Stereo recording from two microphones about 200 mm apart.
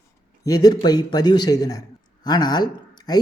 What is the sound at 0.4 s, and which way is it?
Speech, 20° left (ahead or behind).